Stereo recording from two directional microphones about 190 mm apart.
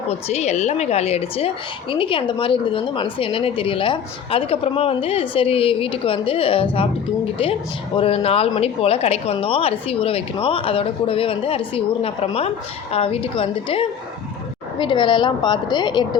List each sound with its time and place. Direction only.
0.3 s a woman's voice: 35° left (ahead or behind)
7.9 s a woman's voice: 30° left (ahead or behind)